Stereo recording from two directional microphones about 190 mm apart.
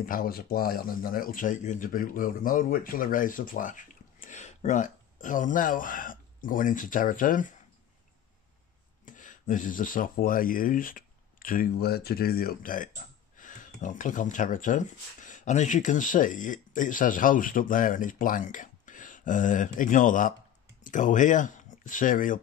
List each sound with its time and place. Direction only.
0.0 s speech: 50° left (ahead or behind)
9.0 s speech: 45° left (ahead or behind)